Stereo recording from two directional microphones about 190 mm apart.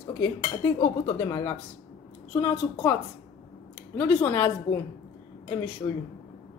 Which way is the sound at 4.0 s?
10° left (ahead or behind).